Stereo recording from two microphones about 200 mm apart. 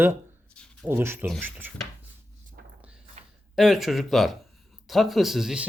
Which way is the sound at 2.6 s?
50° right (ahead or behind).